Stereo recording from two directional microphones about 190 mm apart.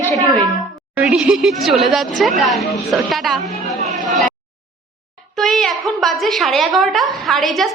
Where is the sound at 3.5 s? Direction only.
35° right (ahead or behind).